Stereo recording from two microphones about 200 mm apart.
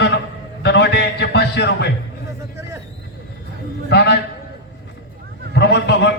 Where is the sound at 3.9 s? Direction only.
60° left (ahead or behind).